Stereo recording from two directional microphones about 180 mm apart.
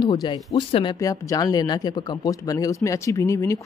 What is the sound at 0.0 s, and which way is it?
Speech, 25° left (ahead or behind).